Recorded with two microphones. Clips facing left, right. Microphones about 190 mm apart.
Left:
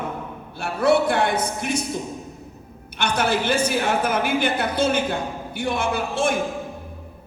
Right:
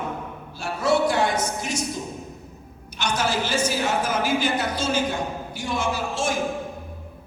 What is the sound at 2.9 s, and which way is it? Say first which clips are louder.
A woman's voice: left 3 dB; 60° left (ahead or behind).